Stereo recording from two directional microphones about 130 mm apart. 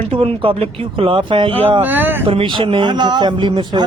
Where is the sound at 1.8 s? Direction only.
15° right (ahead or behind).